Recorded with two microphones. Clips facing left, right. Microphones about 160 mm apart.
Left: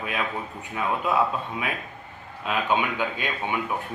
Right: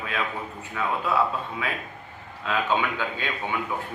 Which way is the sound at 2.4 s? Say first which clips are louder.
Even; 15° left (ahead or behind).